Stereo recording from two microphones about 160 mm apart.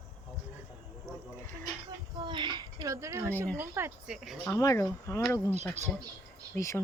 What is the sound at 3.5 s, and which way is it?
Speech, 15° right (ahead or behind).